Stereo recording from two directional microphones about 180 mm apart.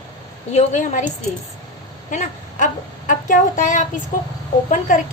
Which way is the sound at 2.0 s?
45° left (ahead or behind).